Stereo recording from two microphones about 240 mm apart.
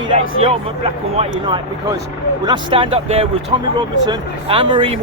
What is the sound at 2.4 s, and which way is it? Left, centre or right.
Speech, centre.